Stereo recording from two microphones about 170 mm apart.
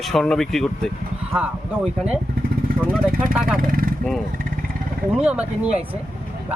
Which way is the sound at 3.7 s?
55° right (ahead or behind).